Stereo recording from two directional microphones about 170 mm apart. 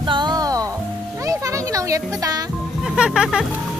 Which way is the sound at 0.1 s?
25° right (ahead or behind).